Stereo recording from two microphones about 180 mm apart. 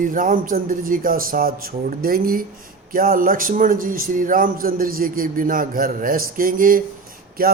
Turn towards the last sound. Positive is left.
turn(degrees=-55)  # may be behind; listen again after turning